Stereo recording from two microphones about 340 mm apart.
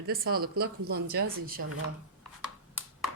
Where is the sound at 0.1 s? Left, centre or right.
Right.